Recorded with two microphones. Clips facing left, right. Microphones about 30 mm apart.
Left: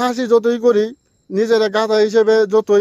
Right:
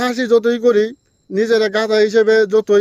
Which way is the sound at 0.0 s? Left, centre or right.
Centre.